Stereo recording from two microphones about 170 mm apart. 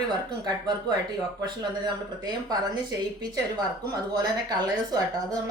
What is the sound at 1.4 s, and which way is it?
Speech, 25° right (ahead or behind).